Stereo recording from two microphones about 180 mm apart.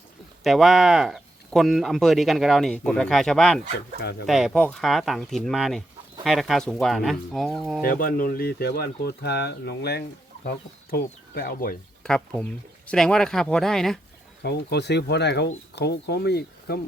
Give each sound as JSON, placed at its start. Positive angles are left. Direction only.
{"t": 0.4, "sound": "speech", "side_deg": 0}
{"t": 7.9, "sound": "speech", "side_deg": 55}
{"t": 10.9, "sound": "speech", "side_deg": 55}
{"t": 12.0, "sound": "speech", "side_deg": 5}
{"t": 14.4, "sound": "speech", "side_deg": 65}